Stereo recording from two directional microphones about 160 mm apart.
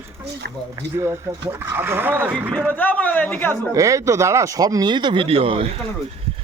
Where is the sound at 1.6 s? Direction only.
15° right (ahead or behind).